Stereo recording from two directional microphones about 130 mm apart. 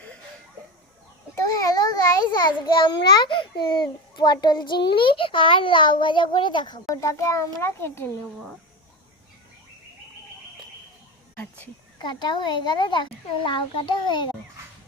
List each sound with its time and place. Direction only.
1.4 s a child's voice: 25° left (ahead or behind)
6.9 s a child's voice: 25° left (ahead or behind)
11.3 s a sound: 10° left (ahead or behind)
11.9 s a woman's voice: 35° left (ahead or behind)